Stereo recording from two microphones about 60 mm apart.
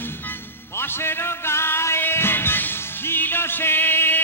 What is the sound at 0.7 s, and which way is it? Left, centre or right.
Music, left.